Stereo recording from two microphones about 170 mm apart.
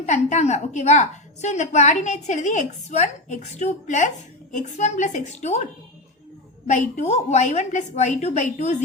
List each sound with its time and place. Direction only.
0.0 s a woman's voice: 45° left (ahead or behind)
6.7 s a woman's voice: 45° left (ahead or behind)